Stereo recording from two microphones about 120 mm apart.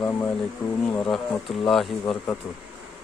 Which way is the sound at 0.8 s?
5° left (ahead or behind).